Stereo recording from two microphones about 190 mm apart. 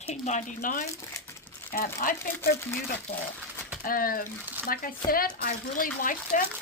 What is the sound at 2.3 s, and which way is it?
Speech, 10° left (ahead or behind).